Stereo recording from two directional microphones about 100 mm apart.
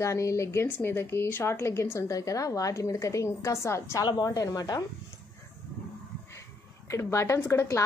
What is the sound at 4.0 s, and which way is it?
Speech, 40° left (ahead or behind).